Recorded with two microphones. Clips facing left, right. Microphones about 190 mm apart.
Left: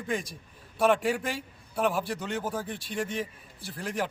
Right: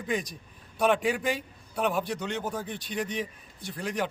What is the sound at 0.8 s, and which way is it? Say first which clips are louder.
A man's voice: even; centre (ahead or behind).